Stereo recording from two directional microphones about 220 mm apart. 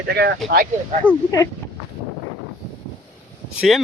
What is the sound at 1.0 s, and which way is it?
Speech, 10° right (ahead or behind).